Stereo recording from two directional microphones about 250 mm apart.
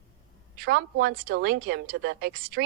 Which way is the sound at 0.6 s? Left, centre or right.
Right.